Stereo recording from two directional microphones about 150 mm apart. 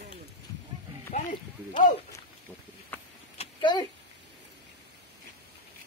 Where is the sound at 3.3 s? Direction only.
30° left (ahead or behind).